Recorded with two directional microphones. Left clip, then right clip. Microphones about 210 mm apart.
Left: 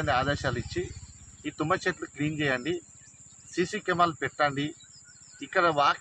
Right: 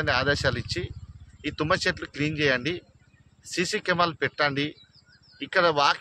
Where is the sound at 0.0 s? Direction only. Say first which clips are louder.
Right 3 dB; 20° right (ahead or behind).